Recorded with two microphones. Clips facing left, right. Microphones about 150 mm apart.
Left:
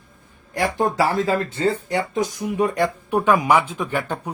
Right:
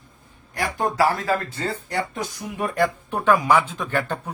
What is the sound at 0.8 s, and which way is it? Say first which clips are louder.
Speech: even; 20° left (ahead or behind).